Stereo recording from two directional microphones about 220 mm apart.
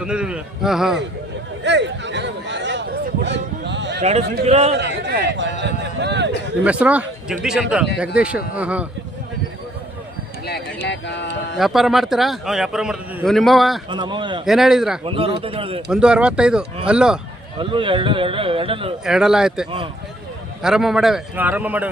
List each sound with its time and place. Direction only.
0.0 s a man's voice: 5° right (ahead or behind)
1.6 s a sound: 55° right (ahead or behind)
3.2 s bow-wow: 55° right (ahead or behind)
4.4 s a man's voice: 30° right (ahead or behind)
4.8 s speech: 50° right (ahead or behind)
6.7 s a man's voice: 5° right (ahead or behind)
10.4 s speech: 50° left (ahead or behind)
11.5 s a man's voice: centre (ahead or behind)
13.9 s a man's voice: 20° right (ahead or behind)
14.4 s a man's voice: centre (ahead or behind)
15.0 s a man's voice: 25° right (ahead or behind)
15.9 s a man's voice: 5° right (ahead or behind)
17.6 s a man's voice: 20° right (ahead or behind)
19.0 s a man's voice: centre (ahead or behind)